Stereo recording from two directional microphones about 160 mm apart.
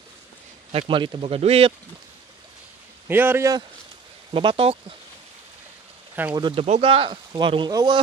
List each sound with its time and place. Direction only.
0.7 s speech: 35° right (ahead or behind)
3.1 s a man's voice: 15° right (ahead or behind)
4.3 s speech: 30° right (ahead or behind)
6.3 s speech: 30° right (ahead or behind)
6.6 s speech: 40° right (ahead or behind)